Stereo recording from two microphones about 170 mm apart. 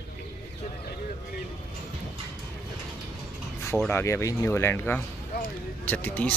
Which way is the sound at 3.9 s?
15° left (ahead or behind).